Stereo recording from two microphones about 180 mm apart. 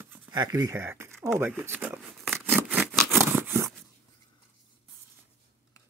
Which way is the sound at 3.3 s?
10° right (ahead or behind).